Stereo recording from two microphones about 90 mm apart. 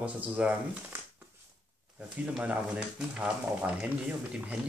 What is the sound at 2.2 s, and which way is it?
Speech, 15° right (ahead or behind).